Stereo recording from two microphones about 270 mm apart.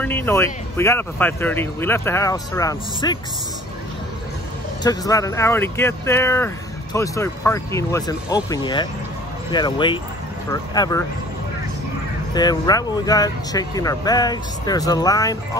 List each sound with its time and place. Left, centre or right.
0.0 s speech: centre
4.8 s speech: centre
12.4 s speech: centre